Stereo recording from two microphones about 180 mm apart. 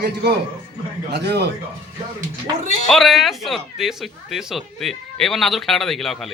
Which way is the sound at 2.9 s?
Centre (ahead or behind).